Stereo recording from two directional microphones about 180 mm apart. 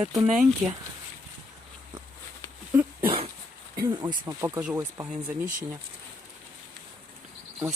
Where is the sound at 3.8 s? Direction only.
25° right (ahead or behind).